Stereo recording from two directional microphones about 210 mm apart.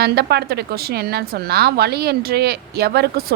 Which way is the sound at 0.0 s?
50° right (ahead or behind).